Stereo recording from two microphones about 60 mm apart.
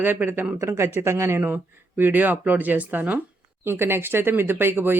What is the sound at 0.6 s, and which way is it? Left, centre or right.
Speech, right.